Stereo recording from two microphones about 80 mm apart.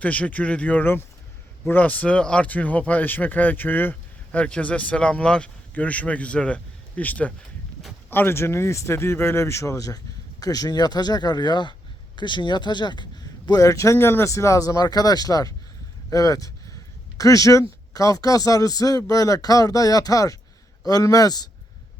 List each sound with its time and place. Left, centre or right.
0.0 s speech: centre
8.1 s speech: left